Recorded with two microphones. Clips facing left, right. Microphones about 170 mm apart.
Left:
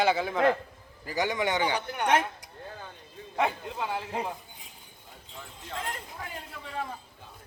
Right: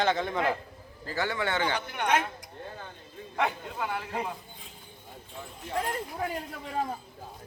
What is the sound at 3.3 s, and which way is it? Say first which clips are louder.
Speech: left 1 dB; 20° left (ahead or behind).